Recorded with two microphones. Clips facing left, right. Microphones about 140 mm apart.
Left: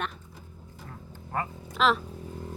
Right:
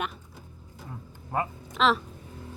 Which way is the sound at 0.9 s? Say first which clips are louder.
Right 2 dB; 15° right (ahead or behind).